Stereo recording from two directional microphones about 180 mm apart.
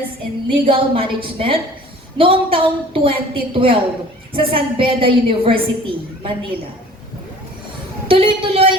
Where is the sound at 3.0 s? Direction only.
30° right (ahead or behind).